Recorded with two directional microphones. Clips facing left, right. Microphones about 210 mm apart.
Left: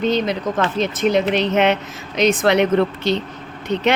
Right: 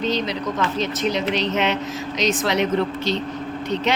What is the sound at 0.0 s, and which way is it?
Speech, 55° left (ahead or behind).